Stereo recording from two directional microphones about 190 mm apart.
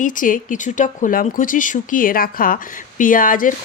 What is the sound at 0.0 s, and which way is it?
Speech, 45° left (ahead or behind).